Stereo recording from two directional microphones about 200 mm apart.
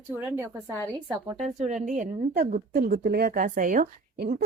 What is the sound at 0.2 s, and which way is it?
Speech, 10° right (ahead or behind).